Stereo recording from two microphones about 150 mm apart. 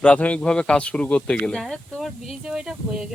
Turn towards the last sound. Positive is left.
turn(degrees=-5)  # may be behind; listen again after turning